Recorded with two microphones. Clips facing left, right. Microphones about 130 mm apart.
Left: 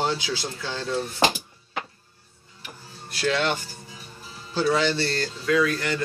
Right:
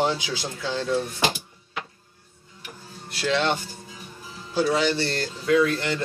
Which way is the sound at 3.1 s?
25° right (ahead or behind).